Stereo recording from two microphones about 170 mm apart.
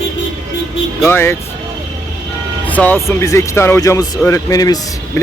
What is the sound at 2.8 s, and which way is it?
Speech, 10° left (ahead or behind).